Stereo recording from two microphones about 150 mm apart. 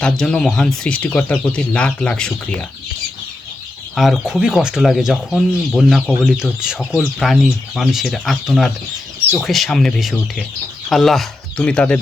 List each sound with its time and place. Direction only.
0.0 s speech: 5° left (ahead or behind)
3.9 s speech: centre (ahead or behind)